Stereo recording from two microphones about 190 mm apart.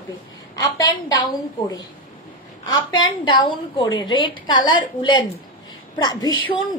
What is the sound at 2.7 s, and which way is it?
A woman's voice, 25° left (ahead or behind).